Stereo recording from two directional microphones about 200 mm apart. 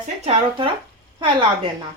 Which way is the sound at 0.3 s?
25° right (ahead or behind).